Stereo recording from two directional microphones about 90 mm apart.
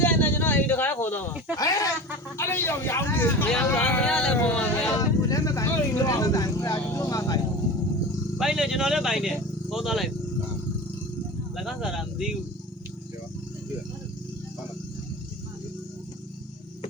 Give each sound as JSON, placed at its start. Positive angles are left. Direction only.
{"t": 0.0, "sound": "a sound", "side_deg": 20}
{"t": 1.5, "sound": "speech", "side_deg": 40}
{"t": 2.4, "sound": "speech", "side_deg": 30}
{"t": 3.8, "sound": "speech", "side_deg": 10}
{"t": 4.9, "sound": "vehicle", "side_deg": 40}
{"t": 8.4, "sound": "speech", "side_deg": -5}
{"t": 11.5, "sound": "speech", "side_deg": -5}